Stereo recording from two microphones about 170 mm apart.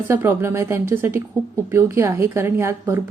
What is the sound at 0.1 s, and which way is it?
A woman's voice, 15° right (ahead or behind).